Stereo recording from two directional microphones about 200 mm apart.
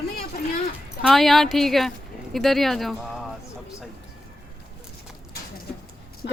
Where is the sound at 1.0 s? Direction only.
Centre (ahead or behind).